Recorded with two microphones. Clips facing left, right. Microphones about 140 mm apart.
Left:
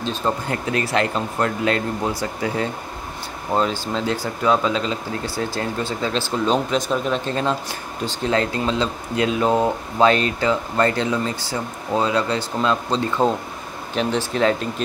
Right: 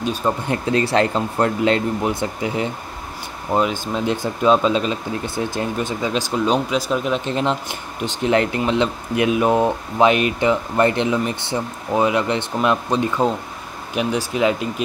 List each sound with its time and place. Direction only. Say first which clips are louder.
0.0 s speech: right 2 dB; 10° right (ahead or behind)
0.5 s speech: right 4 dB; 25° right (ahead or behind); by 7.2 s 5° right (ahead or behind)
7.2 s speech: right 1 dB; 20° right (ahead or behind)